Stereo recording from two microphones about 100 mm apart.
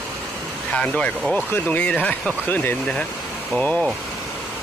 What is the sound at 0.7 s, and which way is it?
Speech, 10° left (ahead or behind).